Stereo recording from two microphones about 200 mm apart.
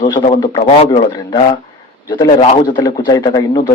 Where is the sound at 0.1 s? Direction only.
25° left (ahead or behind).